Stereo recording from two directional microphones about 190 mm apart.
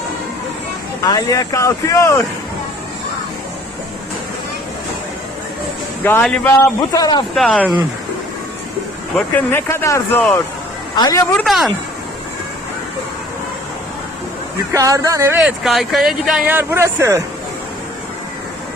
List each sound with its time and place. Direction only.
1.0 s speech: 20° left (ahead or behind)
6.0 s speech: 10° left (ahead or behind)
6.9 s speech: 20° left (ahead or behind)
7.3 s speech: 5° left (ahead or behind)
9.5 s speech: 10° left (ahead or behind)
11.3 s speech: centre (ahead or behind)
14.7 s speech: 20° right (ahead or behind)
15.4 s speech: centre (ahead or behind)